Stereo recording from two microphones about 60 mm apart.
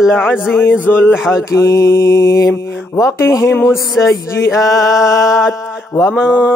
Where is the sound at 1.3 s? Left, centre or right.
Left.